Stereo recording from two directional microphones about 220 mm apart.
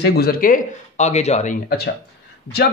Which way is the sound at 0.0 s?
45° left (ahead or behind).